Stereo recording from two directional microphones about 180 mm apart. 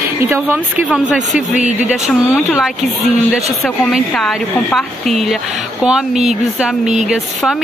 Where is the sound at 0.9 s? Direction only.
5° right (ahead or behind).